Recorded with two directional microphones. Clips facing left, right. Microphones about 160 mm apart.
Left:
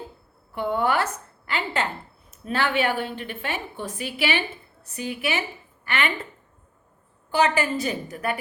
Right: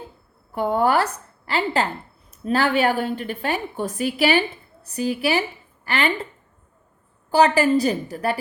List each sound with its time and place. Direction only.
0.5 s a woman's voice: 40° right (ahead or behind)
7.3 s a woman's voice: 35° right (ahead or behind)